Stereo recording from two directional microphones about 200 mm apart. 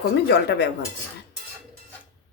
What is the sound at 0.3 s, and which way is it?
Speech, 55° left (ahead or behind).